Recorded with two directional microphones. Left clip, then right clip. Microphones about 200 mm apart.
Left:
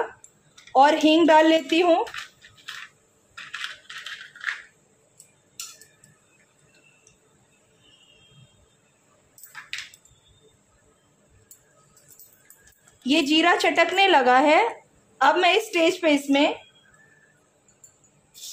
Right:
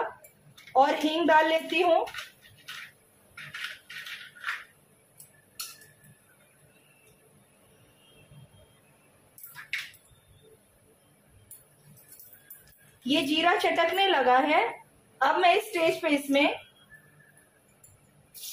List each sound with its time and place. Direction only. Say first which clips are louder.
0.7 s a woman's voice: left 7 dB; 55° left (ahead or behind)
13.0 s a woman's voice: left 5 dB; 55° left (ahead or behind)